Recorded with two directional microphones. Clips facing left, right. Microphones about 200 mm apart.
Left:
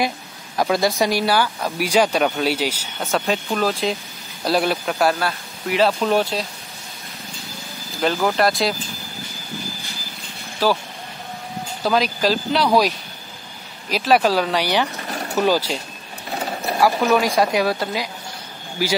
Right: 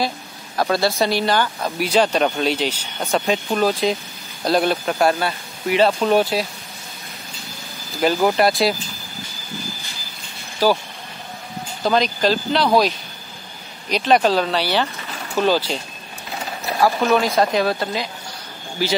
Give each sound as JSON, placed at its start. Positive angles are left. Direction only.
{"t": 0.6, "sound": "speech", "side_deg": 15}
{"t": 3.4, "sound": "speech", "side_deg": 0}
{"t": 8.0, "sound": "speech", "side_deg": -10}
{"t": 10.6, "sound": "speech", "side_deg": 0}
{"t": 11.8, "sound": "speech", "side_deg": 5}
{"t": 15.0, "sound": "a sound", "side_deg": 40}
{"t": 15.4, "sound": "speech", "side_deg": 10}
{"t": 16.8, "sound": "speech", "side_deg": 10}